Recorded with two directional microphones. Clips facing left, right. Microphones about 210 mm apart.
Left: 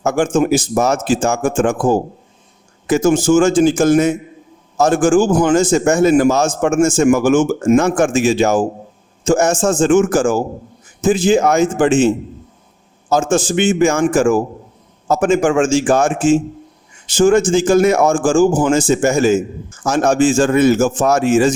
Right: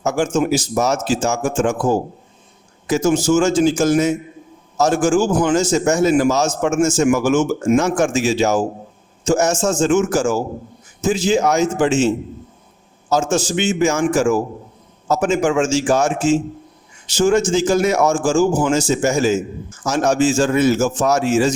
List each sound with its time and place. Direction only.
0.0 s a man's voice: 55° left (ahead or behind)